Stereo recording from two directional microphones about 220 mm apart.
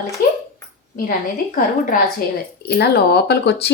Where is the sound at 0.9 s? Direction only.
40° left (ahead or behind).